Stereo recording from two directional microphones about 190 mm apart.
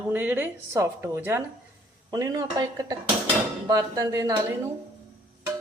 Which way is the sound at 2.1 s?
20° right (ahead or behind).